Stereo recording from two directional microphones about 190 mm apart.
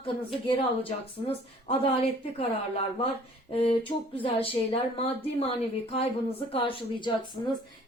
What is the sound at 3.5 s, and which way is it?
A woman's voice, 30° left (ahead or behind).